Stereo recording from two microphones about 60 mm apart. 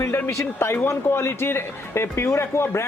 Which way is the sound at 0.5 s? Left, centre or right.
Left.